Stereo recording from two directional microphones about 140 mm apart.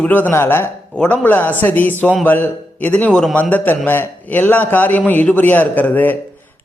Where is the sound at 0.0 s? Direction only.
15° left (ahead or behind).